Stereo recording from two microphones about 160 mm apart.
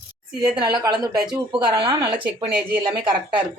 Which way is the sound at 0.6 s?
25° right (ahead or behind).